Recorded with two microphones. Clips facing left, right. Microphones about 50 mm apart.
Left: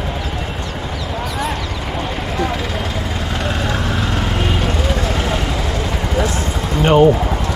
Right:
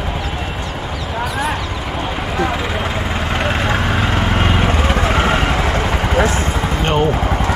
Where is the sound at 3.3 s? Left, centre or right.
Right.